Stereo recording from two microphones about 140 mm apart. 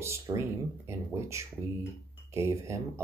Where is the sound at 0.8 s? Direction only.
20° right (ahead or behind).